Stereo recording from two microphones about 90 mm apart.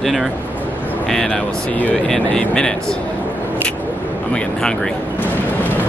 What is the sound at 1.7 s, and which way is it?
Speech, 15° left (ahead or behind).